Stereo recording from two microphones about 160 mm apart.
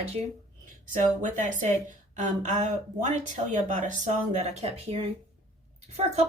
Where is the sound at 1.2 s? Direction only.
50° right (ahead or behind).